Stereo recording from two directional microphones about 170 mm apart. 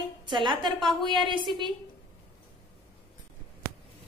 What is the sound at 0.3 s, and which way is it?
Speech, 30° right (ahead or behind).